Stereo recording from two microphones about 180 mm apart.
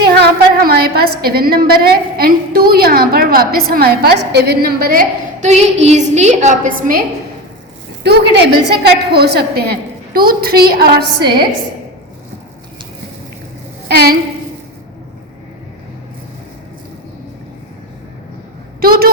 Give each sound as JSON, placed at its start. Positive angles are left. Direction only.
{"t": 0.0, "sound": "a woman's voice", "side_deg": -60}
{"t": 8.0, "sound": "a woman's voice", "side_deg": -65}
{"t": 13.8, "sound": "a woman's voice", "side_deg": -60}
{"t": 18.8, "sound": "a woman's voice", "side_deg": -55}